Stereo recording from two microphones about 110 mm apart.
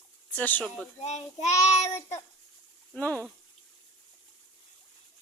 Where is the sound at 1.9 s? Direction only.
25° left (ahead or behind).